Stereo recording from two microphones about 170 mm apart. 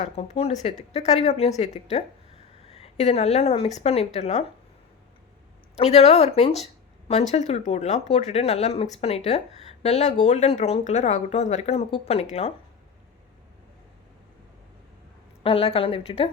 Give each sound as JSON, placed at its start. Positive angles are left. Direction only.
{"t": 0.0, "sound": "speech", "side_deg": 35}
{"t": 5.7, "sound": "speech", "side_deg": 40}
{"t": 15.4, "sound": "speech", "side_deg": 35}